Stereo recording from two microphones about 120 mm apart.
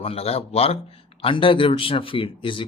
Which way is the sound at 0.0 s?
55° left (ahead or behind).